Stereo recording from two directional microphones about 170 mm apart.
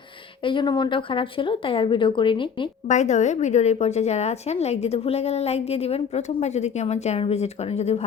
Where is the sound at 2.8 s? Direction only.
45° left (ahead or behind).